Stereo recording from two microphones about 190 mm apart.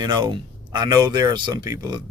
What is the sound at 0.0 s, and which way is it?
A man's voice, 25° right (ahead or behind).